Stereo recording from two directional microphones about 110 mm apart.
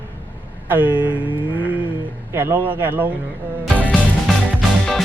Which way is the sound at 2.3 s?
20° right (ahead or behind).